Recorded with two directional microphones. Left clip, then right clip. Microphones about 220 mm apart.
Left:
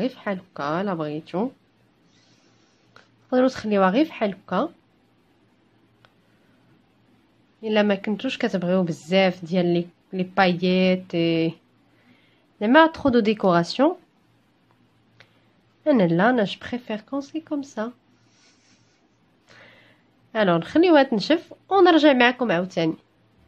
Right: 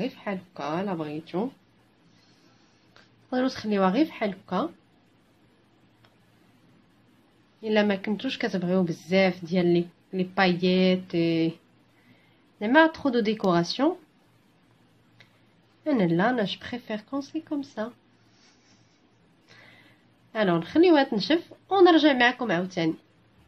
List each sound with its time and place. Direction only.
0.0 s a woman's voice: 35° left (ahead or behind)
2.9 s speech: 30° left (ahead or behind)
7.6 s speech: 25° left (ahead or behind)
12.5 s a woman's voice: 30° left (ahead or behind)
15.8 s speech: 30° left (ahead or behind)
20.3 s a woman's voice: 30° left (ahead or behind)